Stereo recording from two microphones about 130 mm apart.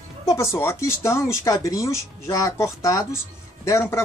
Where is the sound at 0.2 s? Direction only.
25° left (ahead or behind).